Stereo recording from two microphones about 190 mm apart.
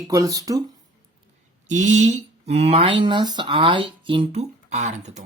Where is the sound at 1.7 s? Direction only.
40° right (ahead or behind).